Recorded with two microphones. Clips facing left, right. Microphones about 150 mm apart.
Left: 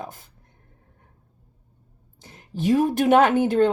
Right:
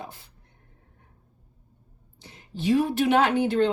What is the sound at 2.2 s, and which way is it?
A woman's voice, 45° left (ahead or behind).